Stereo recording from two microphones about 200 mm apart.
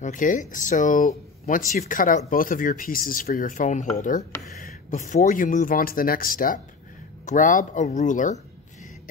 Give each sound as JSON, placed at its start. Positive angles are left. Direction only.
{"t": 0.0, "sound": "speech", "side_deg": 40}